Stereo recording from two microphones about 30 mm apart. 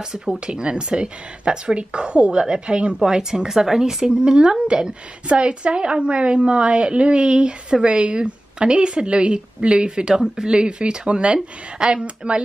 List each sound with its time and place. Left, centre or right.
0.5 s a woman's voice: right
3.0 s speech: centre
5.3 s a woman's voice: right